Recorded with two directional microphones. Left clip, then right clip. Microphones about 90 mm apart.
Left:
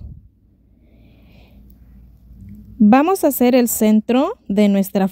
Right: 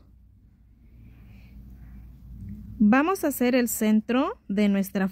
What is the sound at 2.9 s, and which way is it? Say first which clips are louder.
A woman's voice: left 9 dB; 50° left (ahead or behind).